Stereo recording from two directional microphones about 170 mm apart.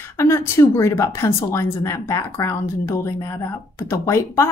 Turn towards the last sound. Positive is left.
turn(degrees=15)  # may be behind; listen again after turning